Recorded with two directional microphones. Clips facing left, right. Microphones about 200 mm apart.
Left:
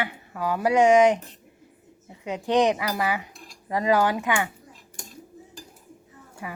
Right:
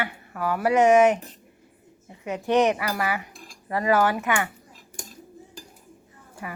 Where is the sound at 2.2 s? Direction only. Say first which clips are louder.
Even; 15° left (ahead or behind).